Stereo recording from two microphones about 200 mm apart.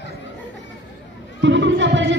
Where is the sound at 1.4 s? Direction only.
60° right (ahead or behind).